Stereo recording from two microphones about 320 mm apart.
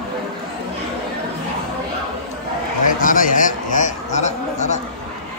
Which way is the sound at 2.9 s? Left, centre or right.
Left.